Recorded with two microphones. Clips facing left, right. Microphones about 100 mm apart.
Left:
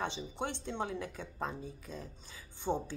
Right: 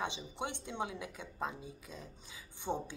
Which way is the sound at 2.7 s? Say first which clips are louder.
Left 3 dB; 5° left (ahead or behind).